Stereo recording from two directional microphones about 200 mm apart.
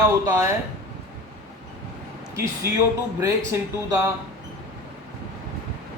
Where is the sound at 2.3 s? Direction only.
15° right (ahead or behind).